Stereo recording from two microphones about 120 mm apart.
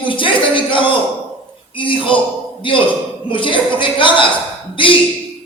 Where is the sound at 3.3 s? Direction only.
45° left (ahead or behind).